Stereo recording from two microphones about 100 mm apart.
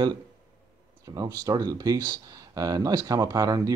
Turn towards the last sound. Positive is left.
turn(degrees=-35)  # may be behind; listen again after turning